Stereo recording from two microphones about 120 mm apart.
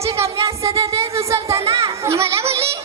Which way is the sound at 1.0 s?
25° right (ahead or behind).